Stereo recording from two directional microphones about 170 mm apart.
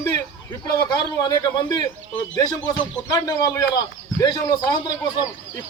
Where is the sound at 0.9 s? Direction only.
25° left (ahead or behind).